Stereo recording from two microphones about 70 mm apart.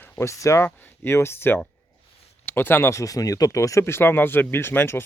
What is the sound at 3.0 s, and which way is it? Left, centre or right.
Speech, left.